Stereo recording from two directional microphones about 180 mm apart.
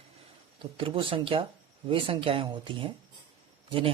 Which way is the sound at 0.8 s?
30° right (ahead or behind).